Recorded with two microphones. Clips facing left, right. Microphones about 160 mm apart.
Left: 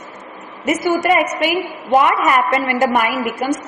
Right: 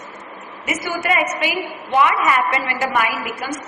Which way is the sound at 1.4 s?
45° left (ahead or behind).